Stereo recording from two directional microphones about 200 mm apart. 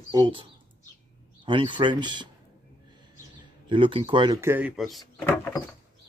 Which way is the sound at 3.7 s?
25° right (ahead or behind).